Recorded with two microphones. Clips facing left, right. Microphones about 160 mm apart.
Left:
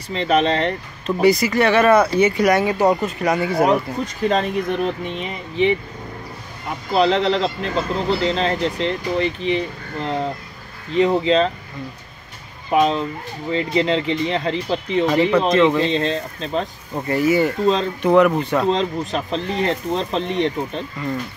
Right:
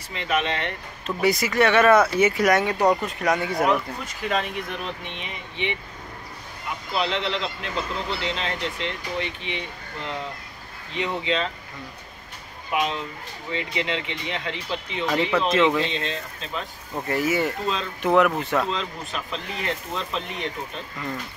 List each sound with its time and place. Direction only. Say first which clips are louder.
0.1 s speech: left 8 dB; 35° left (ahead or behind)
1.0 s speech: left 7 dB; centre (ahead or behind)
3.6 s speech: left 5 dB; 40° left (ahead or behind)
6.9 s speech: left 9 dB; 40° left (ahead or behind)
12.7 s speech: left 9 dB; 35° left (ahead or behind)
15.5 s speech: left 5 dB; centre (ahead or behind)
15.9 s speech: left 9 dB; 35° left (ahead or behind)
17.1 s speech: left 6 dB; centre (ahead or behind)
18.7 s speech: left 10 dB; 35° left (ahead or behind)